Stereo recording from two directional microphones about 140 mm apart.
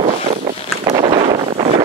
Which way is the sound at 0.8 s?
45° right (ahead or behind).